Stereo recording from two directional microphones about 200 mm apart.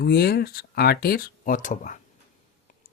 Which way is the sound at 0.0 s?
50° left (ahead or behind).